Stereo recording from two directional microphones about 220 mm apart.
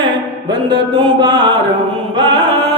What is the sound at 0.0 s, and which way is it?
Mantra, 20° right (ahead or behind).